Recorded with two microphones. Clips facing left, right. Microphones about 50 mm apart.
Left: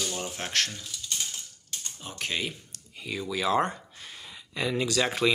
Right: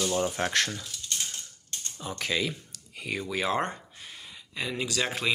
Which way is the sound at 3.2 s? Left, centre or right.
Right.